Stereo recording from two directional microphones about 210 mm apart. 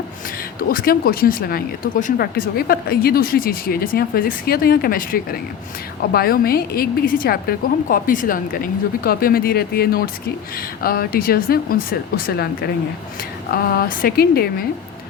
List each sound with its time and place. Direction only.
0.7 s speech: 45° left (ahead or behind)
13.5 s speech: 45° left (ahead or behind)